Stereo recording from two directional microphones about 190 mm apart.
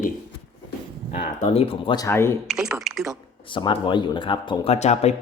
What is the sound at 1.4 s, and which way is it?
Speech, 30° left (ahead or behind).